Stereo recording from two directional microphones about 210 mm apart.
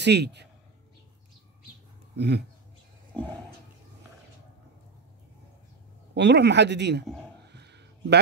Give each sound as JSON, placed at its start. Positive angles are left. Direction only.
{"t": 0.0, "sound": "a man's voice", "side_deg": -55}
{"t": 2.1, "sound": "speech", "side_deg": -55}
{"t": 6.1, "sound": "speech", "side_deg": -55}
{"t": 7.4, "sound": "a sound", "side_deg": -55}